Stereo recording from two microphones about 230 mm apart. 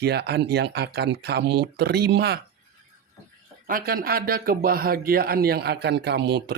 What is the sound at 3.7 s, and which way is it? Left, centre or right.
A man's voice, right.